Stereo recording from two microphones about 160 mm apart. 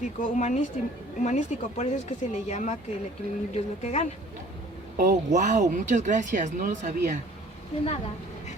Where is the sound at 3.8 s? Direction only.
45° left (ahead or behind).